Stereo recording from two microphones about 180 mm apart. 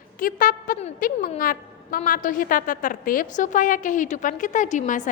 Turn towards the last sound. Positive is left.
turn(degrees=45)  # may be behind; listen again after turning